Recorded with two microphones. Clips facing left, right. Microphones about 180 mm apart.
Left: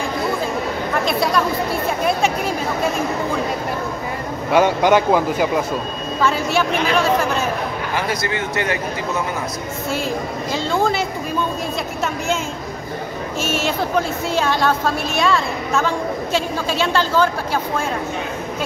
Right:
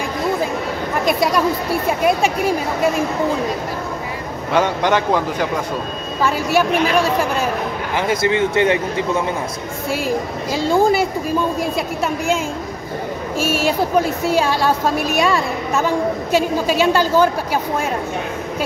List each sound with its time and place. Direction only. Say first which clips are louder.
1.0 s speech: right 3 dB; 10° right (ahead or behind)
4.5 s speech: left 2 dB; 10° left (ahead or behind)
6.2 s a woman's voice: right 2 dB; 10° right (ahead or behind)
7.9 s speech: right 7 dB; 25° right (ahead or behind)
10.0 s a woman's voice: right 2 dB; 10° right (ahead or behind)
14.3 s a woman's voice: right 1 dB; 10° right (ahead or behind)